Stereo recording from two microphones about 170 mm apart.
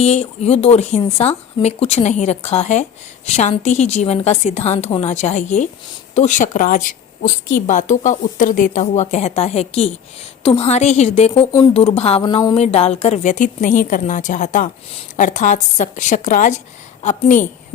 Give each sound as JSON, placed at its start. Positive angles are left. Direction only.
{"t": 0.0, "sound": "speech", "side_deg": 40}